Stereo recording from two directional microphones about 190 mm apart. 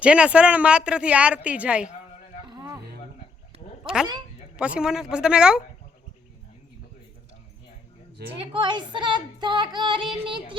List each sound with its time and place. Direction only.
0.0 s a woman's voice: 5° right (ahead or behind)
2.5 s a sound: 20° right (ahead or behind)
4.5 s speech: 5° right (ahead or behind)
8.4 s female singing: 25° right (ahead or behind)